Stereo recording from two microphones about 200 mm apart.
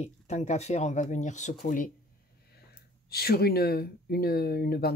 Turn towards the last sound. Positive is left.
turn(degrees=50)  # may be behind; listen again after turning